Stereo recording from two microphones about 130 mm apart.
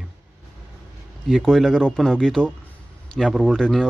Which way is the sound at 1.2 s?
Centre (ahead or behind).